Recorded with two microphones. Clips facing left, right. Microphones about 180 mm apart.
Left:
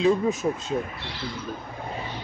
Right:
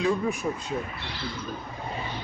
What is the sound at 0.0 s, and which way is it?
Speech, 20° left (ahead or behind).